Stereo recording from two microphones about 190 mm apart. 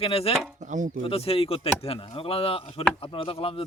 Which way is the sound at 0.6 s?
40° right (ahead or behind).